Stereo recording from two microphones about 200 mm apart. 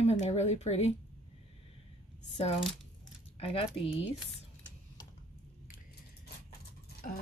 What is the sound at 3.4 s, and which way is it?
Speech, 30° left (ahead or behind).